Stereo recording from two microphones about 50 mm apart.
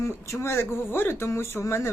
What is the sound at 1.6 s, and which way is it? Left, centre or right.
Speech, left.